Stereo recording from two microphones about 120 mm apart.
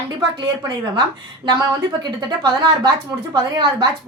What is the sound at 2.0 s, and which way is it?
A woman's voice, 35° right (ahead or behind).